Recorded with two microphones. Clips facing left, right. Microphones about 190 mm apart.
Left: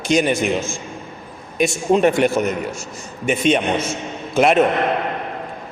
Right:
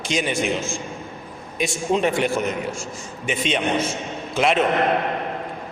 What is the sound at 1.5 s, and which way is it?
A man's voice, 50° left (ahead or behind).